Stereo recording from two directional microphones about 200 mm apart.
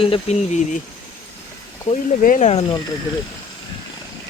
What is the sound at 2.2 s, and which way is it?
Speech, 40° left (ahead or behind).